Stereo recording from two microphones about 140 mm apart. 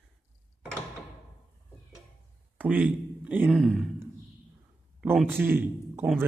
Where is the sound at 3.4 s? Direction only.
Centre (ahead or behind).